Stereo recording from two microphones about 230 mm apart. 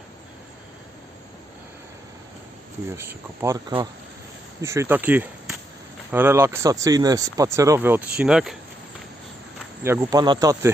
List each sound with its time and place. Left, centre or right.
2.9 s speech: centre
9.8 s speech: centre